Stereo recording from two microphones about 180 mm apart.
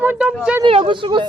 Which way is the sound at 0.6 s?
30° right (ahead or behind).